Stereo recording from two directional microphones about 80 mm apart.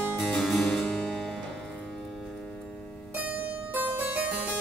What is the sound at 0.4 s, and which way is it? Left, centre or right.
Harpsichord, centre.